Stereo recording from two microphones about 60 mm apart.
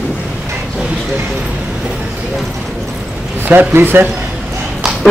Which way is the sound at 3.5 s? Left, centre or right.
Right.